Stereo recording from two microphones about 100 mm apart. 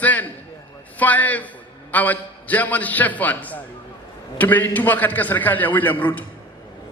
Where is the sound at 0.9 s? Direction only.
15° left (ahead or behind).